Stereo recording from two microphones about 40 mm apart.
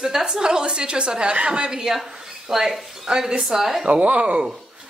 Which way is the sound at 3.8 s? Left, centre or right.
Right.